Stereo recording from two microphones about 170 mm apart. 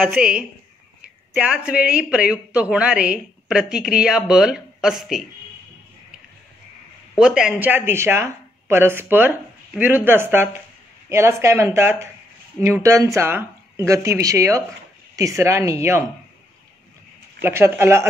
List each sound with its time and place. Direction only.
0.0 s a woman's voice: 5° right (ahead or behind)
7.2 s speech: 5° right (ahead or behind)
17.4 s speech: 15° right (ahead or behind)